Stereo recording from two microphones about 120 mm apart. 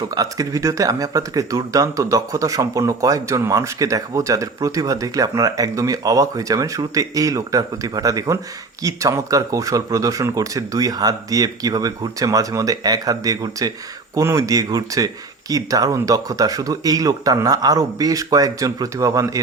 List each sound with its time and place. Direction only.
0.1 s speech: 30° right (ahead or behind)